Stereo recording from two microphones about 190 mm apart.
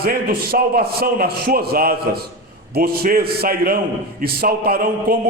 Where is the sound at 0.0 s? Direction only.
55° right (ahead or behind).